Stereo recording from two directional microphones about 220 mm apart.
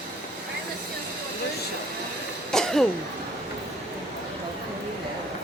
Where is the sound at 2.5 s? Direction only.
Centre (ahead or behind).